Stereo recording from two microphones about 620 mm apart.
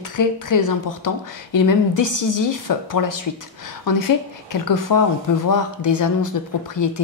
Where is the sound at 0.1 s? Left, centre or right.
Left.